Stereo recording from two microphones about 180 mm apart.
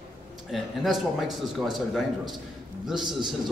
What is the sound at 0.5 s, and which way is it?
A man's voice, centre (ahead or behind).